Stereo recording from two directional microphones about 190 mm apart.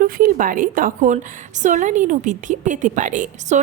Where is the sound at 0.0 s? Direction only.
45° right (ahead or behind).